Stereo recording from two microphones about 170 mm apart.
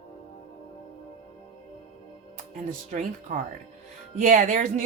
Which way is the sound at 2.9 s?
45° right (ahead or behind).